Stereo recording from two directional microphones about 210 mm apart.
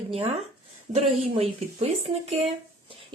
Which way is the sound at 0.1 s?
30° right (ahead or behind).